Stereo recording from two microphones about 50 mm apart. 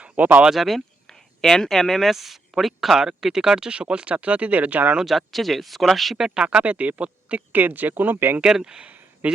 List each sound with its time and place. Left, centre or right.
0.0 s a sound: right
0.5 s speech: centre
1.0 s speech: centre; by 4.9 s right
5.0 s speech: centre
6.1 s speech: centre
6.4 s speech: right
7.5 s speech: right
8.4 s speech: centre
9.2 s speech: right